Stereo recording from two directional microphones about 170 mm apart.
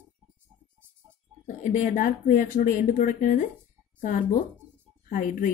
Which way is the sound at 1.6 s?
45° left (ahead or behind).